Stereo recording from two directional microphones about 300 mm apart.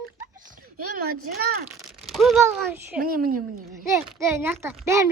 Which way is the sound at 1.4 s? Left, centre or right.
Right.